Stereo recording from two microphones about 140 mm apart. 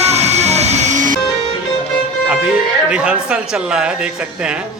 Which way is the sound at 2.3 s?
5° right (ahead or behind).